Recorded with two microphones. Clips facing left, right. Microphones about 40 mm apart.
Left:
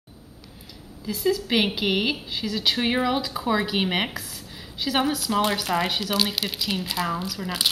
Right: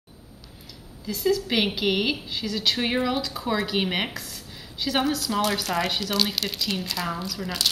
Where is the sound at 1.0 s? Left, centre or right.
Centre.